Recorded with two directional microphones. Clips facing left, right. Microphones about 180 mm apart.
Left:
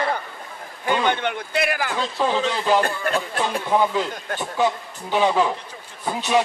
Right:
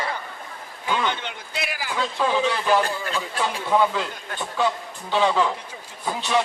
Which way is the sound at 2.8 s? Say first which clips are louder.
Left 4 dB; 55° left (ahead or behind).